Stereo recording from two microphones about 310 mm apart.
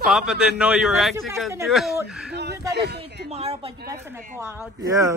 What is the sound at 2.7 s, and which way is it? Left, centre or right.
Speech, right.